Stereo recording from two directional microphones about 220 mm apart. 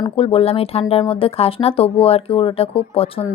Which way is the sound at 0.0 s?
25° left (ahead or behind).